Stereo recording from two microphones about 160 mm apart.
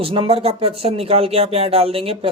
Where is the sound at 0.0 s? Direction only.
35° right (ahead or behind).